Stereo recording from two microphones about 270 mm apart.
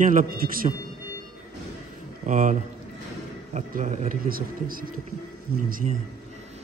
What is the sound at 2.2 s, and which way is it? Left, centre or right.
Speech, right.